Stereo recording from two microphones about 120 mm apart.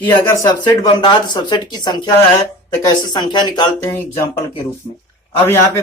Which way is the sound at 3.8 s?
20° left (ahead or behind).